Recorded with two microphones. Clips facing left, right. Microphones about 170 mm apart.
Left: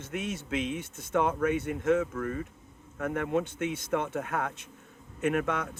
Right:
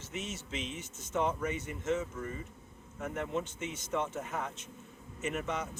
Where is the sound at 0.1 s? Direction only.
55° left (ahead or behind).